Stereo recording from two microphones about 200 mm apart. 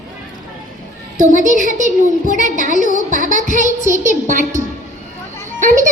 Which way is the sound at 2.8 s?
40° left (ahead or behind).